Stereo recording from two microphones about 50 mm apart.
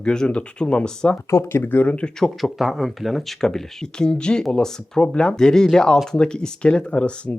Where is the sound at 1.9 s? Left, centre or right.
Left.